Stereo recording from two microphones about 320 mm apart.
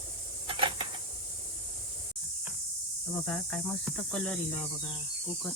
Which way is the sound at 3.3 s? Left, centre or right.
Centre.